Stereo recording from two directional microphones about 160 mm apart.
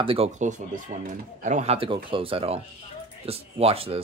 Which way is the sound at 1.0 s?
50° right (ahead or behind).